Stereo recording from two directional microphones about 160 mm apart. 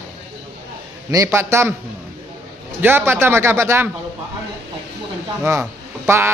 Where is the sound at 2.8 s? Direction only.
15° right (ahead or behind).